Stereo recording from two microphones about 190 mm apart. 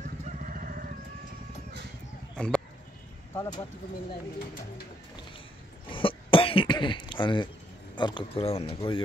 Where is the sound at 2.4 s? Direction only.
5° left (ahead or behind).